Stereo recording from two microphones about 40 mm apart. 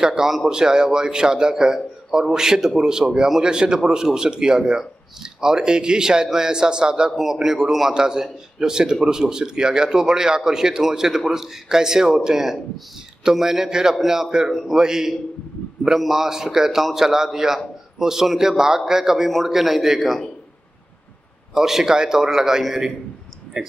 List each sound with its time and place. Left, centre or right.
0.0 s speech: centre
14.5 s a man's voice: centre
14.8 s a man's voice: centre
21.5 s speech: centre